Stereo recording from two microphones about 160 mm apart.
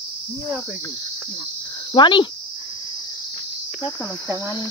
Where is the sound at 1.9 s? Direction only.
30° left (ahead or behind).